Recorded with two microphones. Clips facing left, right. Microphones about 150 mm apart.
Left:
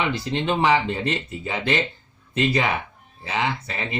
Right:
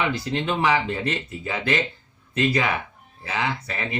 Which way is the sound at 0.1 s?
25° left (ahead or behind).